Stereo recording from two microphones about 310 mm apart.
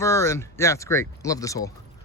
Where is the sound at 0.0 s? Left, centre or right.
Centre.